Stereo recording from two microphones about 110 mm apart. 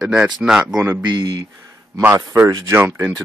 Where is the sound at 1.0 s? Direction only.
45° right (ahead or behind).